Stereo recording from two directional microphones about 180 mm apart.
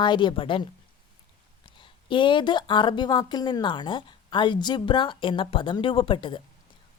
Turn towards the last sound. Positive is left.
turn(degrees=25)  # may be behind; listen again after turning